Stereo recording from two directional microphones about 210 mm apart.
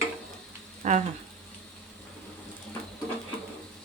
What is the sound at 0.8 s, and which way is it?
Speech, 35° right (ahead or behind).